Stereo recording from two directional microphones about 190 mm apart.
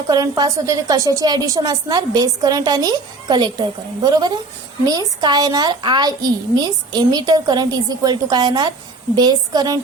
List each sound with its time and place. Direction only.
0.1 s a woman's voice: 20° right (ahead or behind)